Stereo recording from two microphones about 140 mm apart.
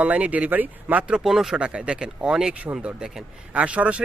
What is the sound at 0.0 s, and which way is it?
Speech, 10° right (ahead or behind).